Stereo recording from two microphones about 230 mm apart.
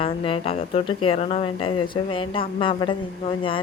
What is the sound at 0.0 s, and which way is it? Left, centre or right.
Speech, left.